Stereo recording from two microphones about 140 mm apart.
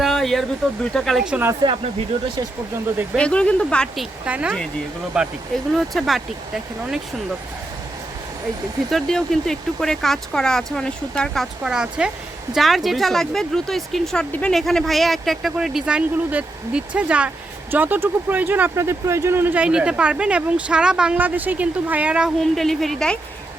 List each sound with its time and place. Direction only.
0.0 s a sound: centre (ahead or behind)
0.9 s speech: centre (ahead or behind)
1.6 s speech: 40° right (ahead or behind)
3.2 s speech: 10° left (ahead or behind)
4.3 s speech: 10° right (ahead or behind)
8.9 s speech: centre (ahead or behind)
11.6 s speech: 5° right (ahead or behind)